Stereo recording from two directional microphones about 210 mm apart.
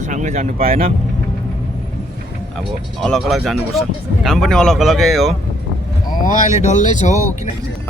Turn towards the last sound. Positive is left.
turn(degrees=35)  # may be behind; listen again after turning